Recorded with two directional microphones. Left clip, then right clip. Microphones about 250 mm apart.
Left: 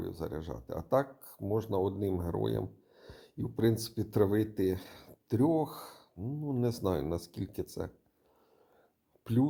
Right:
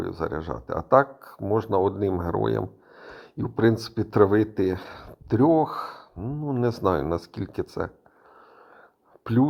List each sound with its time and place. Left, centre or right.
0.0 s speech: centre
9.2 s speech: centre